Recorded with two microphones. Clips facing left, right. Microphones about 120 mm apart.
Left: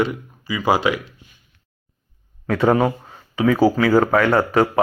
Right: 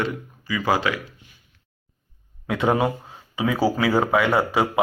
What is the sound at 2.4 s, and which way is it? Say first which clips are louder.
Speech: left 4 dB; 5° right (ahead or behind).